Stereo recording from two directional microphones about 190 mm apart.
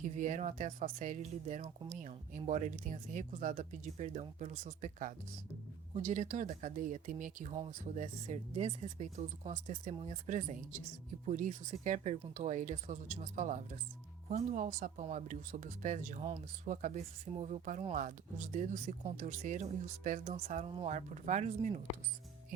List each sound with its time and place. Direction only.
0.0 s speech: 40° right (ahead or behind)